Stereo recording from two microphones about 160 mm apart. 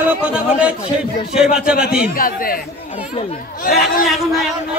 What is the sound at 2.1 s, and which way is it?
Speech, 65° left (ahead or behind).